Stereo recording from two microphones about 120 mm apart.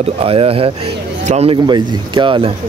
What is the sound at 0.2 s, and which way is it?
Speech, 50° right (ahead or behind).